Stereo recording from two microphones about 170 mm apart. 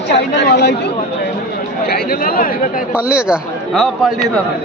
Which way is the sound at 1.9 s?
60° left (ahead or behind).